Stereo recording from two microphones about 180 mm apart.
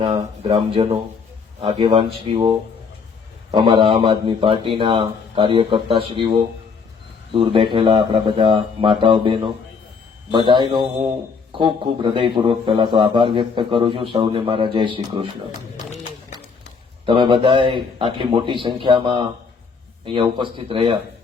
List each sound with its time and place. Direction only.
0.2 s a man's voice: 30° right (ahead or behind)
17.1 s a man's voice: 25° right (ahead or behind)